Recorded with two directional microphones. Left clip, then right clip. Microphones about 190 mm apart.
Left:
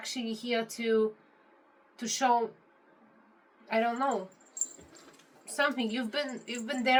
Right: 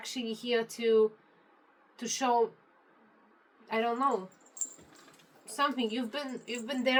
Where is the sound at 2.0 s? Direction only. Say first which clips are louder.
Left 2 dB; 15° left (ahead or behind).